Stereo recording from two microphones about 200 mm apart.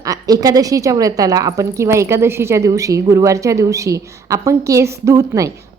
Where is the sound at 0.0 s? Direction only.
15° right (ahead or behind).